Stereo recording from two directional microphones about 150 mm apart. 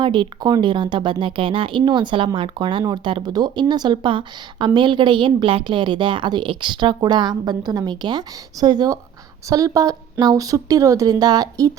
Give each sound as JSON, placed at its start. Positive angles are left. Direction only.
{"t": 0.0, "sound": "speech", "side_deg": -30}